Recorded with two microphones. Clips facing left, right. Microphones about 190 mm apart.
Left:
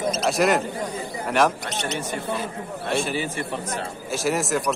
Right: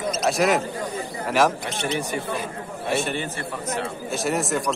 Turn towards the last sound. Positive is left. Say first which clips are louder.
# left 1 dB
turn(degrees=0)  # may be behind; listen again after turning